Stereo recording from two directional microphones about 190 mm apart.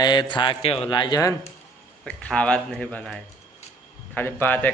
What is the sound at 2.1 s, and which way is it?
Speech, 5° left (ahead or behind).